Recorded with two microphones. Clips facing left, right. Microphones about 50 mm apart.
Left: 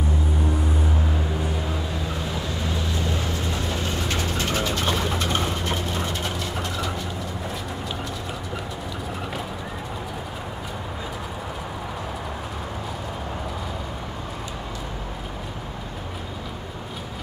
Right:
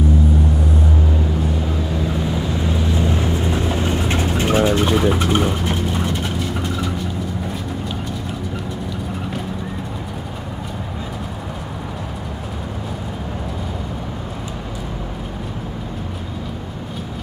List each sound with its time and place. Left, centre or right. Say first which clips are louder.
2.6 s vehicle: right 7 dB; centre